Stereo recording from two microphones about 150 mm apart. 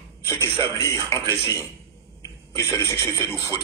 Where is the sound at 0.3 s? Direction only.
20° left (ahead or behind).